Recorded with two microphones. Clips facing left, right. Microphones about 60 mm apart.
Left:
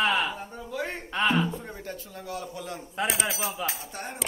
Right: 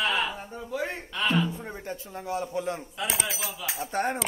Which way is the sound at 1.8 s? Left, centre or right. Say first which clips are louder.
Right 3 dB; right.